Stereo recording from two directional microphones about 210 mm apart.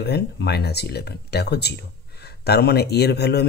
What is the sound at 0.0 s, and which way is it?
Speech, 50° left (ahead or behind).